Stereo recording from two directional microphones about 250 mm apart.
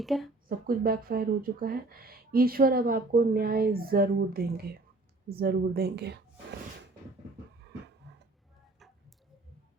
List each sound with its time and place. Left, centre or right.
0.0 s speech: centre
0.4 s speech: right
8.1 s a sound: right